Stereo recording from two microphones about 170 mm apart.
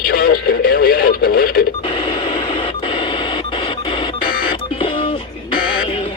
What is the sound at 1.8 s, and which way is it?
Radio, 30° left (ahead or behind).